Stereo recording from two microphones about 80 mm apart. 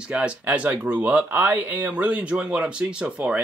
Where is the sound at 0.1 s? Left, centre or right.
Centre.